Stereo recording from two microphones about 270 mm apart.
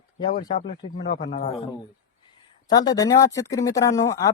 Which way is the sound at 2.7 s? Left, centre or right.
Centre.